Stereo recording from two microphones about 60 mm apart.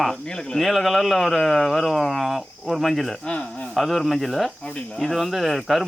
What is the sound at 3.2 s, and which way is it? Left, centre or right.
Speech, left.